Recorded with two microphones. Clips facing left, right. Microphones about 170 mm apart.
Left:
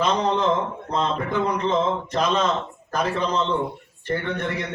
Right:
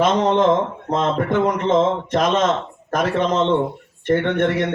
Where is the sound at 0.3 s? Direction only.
85° right.